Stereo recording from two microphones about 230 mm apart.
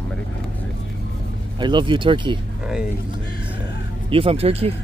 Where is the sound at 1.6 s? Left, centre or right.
Centre.